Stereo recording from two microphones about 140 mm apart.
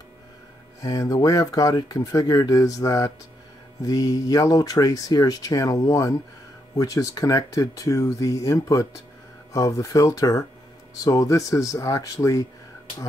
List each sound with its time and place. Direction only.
0.8 s speech: 25° left (ahead or behind)